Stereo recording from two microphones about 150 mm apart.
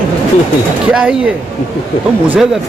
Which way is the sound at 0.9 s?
5° right (ahead or behind).